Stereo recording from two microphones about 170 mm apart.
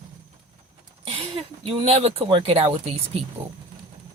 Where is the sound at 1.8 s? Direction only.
40° right (ahead or behind).